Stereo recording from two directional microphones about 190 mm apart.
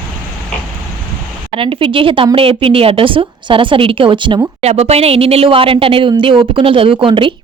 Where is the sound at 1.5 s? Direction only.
30° right (ahead or behind).